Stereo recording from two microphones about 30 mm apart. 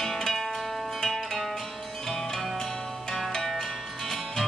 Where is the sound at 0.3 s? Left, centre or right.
Centre.